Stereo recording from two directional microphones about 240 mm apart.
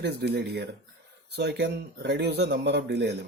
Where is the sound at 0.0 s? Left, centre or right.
Right.